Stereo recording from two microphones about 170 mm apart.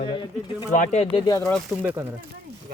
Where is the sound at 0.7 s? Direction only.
45° left (ahead or behind).